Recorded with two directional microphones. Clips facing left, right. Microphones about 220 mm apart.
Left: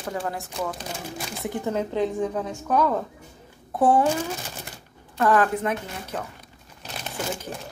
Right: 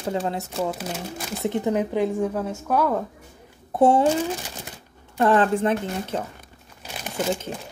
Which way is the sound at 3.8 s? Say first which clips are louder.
Right 2 dB; 25° right (ahead or behind).